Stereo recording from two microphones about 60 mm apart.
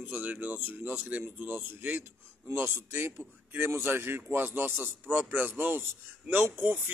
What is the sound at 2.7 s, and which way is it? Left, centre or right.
A man's voice, right.